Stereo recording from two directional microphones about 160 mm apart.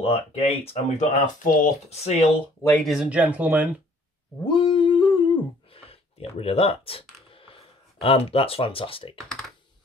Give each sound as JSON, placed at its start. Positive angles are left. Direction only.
{"t": 0.0, "sound": "speech", "side_deg": 40}
{"t": 2.8, "sound": "speech", "side_deg": 0}
{"t": 4.5, "sound": "humming", "side_deg": 30}